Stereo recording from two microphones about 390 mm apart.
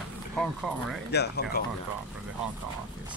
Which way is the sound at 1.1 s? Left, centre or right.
Left.